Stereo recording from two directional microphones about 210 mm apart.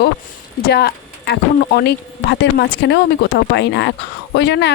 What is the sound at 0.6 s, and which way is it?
Speech, 50° left (ahead or behind).